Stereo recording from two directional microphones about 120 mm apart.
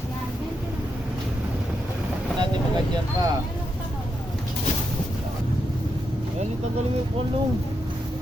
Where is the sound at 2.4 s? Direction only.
35° right (ahead or behind).